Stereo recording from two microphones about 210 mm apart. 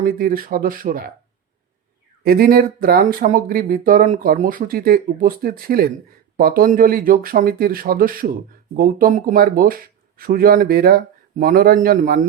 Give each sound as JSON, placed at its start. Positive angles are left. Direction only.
{"t": 0.0, "sound": "speech", "side_deg": -45}
{"t": 2.2, "sound": "speech", "side_deg": -45}